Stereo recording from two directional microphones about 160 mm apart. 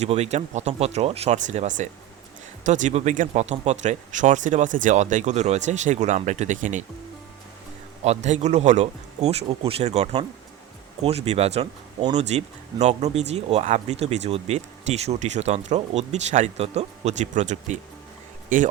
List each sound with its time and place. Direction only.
0.0 s speech: 45° right (ahead or behind)
8.0 s speech: 45° right (ahead or behind)